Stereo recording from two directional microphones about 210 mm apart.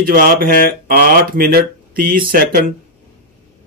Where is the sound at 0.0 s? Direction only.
45° right (ahead or behind).